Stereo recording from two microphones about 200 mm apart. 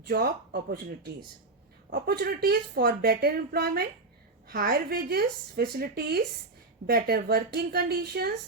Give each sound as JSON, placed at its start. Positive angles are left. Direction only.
{"t": 0.0, "sound": "a woman's voice", "side_deg": -55}